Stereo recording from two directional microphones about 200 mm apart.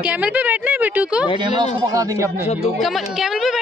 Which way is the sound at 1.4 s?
25° right (ahead or behind).